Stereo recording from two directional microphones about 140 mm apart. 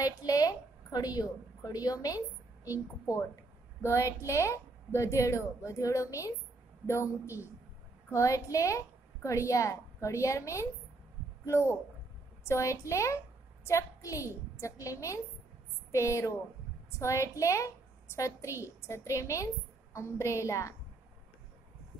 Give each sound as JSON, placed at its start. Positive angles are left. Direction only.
{"t": 0.0, "sound": "a woman's voice", "side_deg": 25}